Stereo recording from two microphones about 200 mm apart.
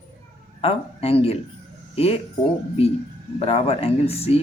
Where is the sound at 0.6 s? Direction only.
30° left (ahead or behind).